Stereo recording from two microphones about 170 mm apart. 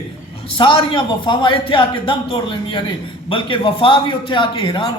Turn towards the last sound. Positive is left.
turn(degrees=30)  # may be behind; listen again after turning